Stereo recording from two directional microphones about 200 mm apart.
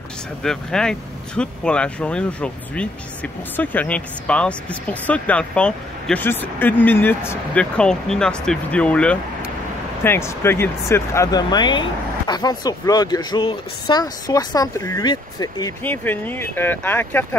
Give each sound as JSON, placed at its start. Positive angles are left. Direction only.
{"t": 0.4, "sound": "speech", "side_deg": 5}